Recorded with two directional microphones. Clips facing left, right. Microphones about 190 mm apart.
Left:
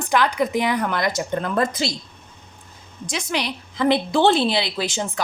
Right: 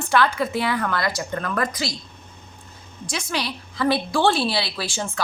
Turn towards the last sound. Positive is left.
turn(degrees=20)  # may be behind; listen again after turning